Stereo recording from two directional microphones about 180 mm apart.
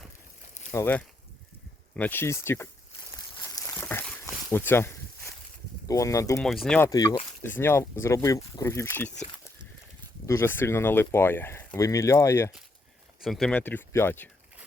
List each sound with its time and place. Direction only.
0.7 s speech: 15° left (ahead or behind)
3.4 s a sound: 20° left (ahead or behind)
5.9 s speech: 20° left (ahead or behind)
6.4 s speech: 5° left (ahead or behind)
10.2 s speech: 15° left (ahead or behind)
13.2 s speech: centre (ahead or behind)